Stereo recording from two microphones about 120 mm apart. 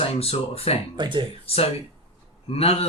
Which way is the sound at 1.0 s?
40° right (ahead or behind).